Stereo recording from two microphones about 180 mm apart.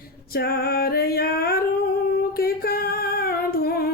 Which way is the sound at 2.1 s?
55° left (ahead or behind).